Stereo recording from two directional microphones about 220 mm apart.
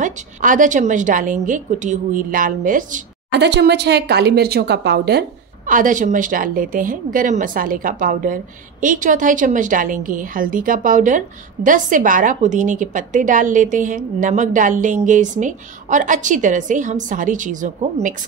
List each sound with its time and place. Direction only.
0.0 s a woman's voice: 35° right (ahead or behind)
3.3 s a woman's voice: 50° right (ahead or behind)
5.7 s a woman's voice: 35° right (ahead or behind)